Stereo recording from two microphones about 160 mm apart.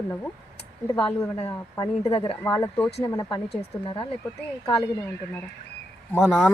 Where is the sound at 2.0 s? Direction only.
35° left (ahead or behind).